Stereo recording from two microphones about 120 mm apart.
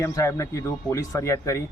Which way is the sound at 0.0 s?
25° left (ahead or behind).